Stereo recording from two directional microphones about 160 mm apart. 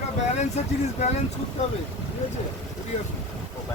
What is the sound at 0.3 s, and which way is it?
Speech, 45° left (ahead or behind).